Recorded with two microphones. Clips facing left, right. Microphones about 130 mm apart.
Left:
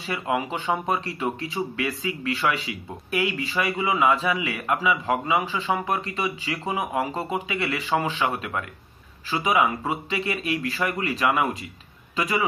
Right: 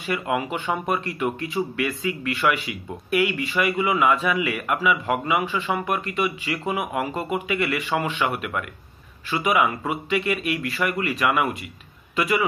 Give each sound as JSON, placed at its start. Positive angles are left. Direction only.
{"t": 0.0, "sound": "speech", "side_deg": 25}
{"t": 3.7, "sound": "speech", "side_deg": 20}